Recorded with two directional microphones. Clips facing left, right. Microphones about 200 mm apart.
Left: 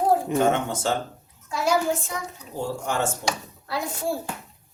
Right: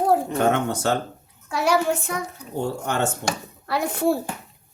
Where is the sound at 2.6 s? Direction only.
65° right (ahead or behind).